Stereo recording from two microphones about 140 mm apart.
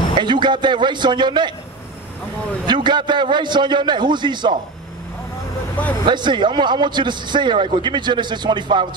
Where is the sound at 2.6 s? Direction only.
30° right (ahead or behind).